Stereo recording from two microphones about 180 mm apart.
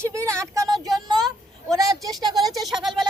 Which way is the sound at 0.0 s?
15° right (ahead or behind).